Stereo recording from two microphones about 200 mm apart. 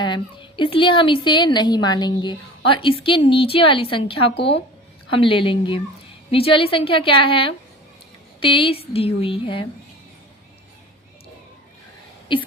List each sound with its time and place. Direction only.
0.0 s a woman's voice: 25° left (ahead or behind)